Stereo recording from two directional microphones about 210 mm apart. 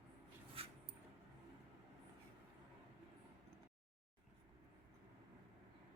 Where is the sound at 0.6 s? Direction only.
25° right (ahead or behind).